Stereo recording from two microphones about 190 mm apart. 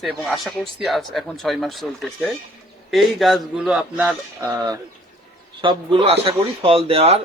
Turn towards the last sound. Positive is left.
turn(degrees=-30)  # may be behind; listen again after turning